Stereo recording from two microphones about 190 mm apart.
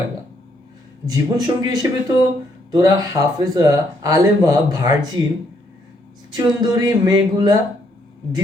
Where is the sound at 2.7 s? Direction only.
20° right (ahead or behind).